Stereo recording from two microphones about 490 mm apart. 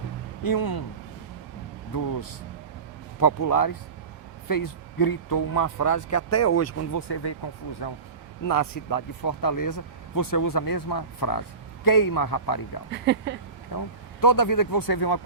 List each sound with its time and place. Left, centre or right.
0.4 s speech: left
1.9 s speech: left
3.2 s speech: left
7.1 s speech: left
8.4 s speech: left
12.9 s speech: right
13.7 s speech: left